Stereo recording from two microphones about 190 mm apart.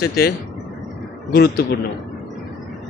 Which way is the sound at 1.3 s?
55° left (ahead or behind).